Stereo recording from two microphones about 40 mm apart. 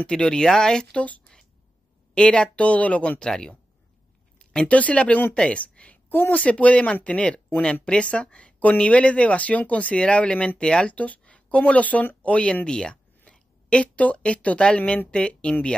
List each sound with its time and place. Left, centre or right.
0.2 s speech: centre
0.9 s speech: left
2.1 s speech: left
3.3 s speech: centre
4.4 s a sound: left
4.6 s speech: left
6.0 s speech: left
6.4 s speech: left
11.0 s a sound: left
11.4 s speech: left
12.6 s speech: left
12.9 s a sound: left
15.0 s speech: left